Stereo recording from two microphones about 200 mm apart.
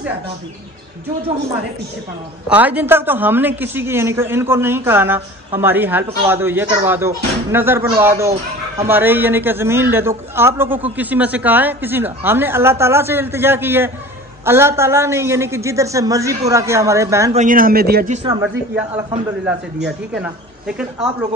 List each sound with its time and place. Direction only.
2.5 s speech: 10° right (ahead or behind)
17.3 s a man's voice: 40° right (ahead or behind)
18.1 s speech: 30° right (ahead or behind)
20.2 s speech: 5° right (ahead or behind)